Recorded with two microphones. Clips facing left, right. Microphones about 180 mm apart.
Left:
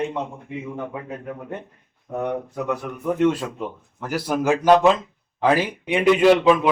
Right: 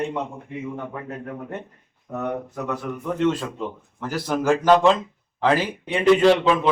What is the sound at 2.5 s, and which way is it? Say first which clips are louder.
A man's voice: left 2 dB; 10° left (ahead or behind).